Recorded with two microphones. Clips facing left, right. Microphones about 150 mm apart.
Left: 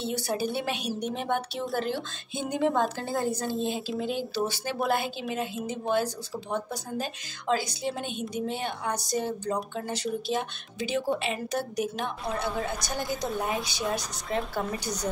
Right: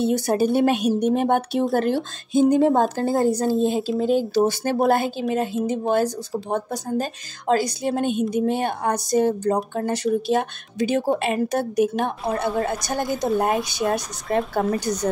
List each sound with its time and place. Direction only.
0.0 s a woman's voice: 50° right (ahead or behind)